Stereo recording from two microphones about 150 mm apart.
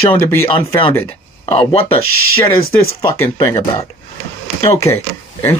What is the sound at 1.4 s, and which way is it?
Speech, 40° left (ahead or behind).